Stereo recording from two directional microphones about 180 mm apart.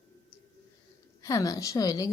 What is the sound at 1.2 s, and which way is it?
Speech, 20° left (ahead or behind).